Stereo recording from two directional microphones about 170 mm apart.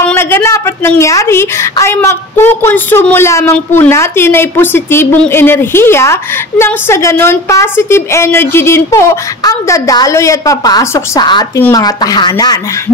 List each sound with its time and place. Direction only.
0.1 s a woman's voice: 15° left (ahead or behind)